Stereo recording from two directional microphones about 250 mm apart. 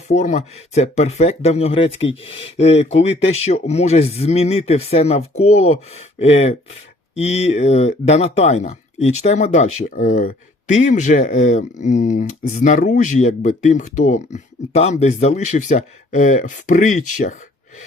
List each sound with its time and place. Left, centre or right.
0.1 s speech: left